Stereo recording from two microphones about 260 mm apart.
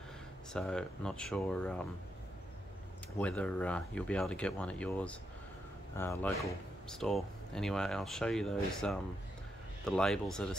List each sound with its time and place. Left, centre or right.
0.5 s speech: centre
3.2 s speech: centre